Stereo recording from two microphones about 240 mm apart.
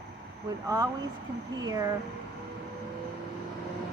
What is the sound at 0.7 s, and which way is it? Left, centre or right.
Speech, centre.